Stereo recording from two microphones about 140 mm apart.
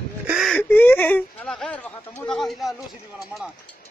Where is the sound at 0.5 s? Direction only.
15° left (ahead or behind).